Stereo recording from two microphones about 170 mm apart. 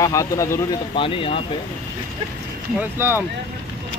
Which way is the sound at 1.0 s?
30° left (ahead or behind).